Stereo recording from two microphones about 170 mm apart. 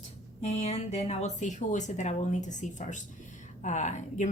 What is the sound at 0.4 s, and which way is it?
Speech, 40° left (ahead or behind).